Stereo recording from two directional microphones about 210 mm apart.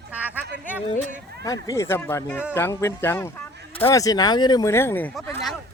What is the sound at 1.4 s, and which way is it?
Speech, 15° left (ahead or behind).